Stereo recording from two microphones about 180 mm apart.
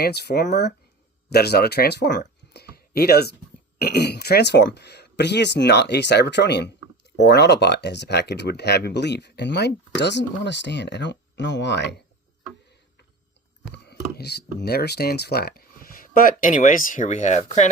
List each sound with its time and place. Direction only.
0.0 s speech: 65° left (ahead or behind)
13.8 s speech: 65° left (ahead or behind); by 17.7 s 40° left (ahead or behind)